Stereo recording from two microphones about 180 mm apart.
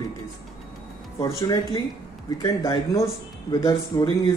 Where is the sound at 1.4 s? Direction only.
20° left (ahead or behind).